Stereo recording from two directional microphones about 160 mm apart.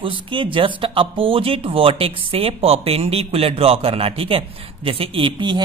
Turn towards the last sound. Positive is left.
turn(degrees=-30)  # may be behind; listen again after turning